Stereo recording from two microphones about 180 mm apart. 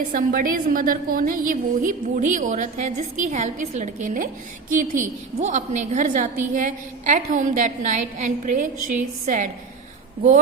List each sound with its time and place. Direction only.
0.1 s a woman's voice: 50° right (ahead or behind)